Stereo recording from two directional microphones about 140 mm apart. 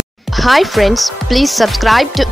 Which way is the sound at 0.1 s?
Centre (ahead or behind).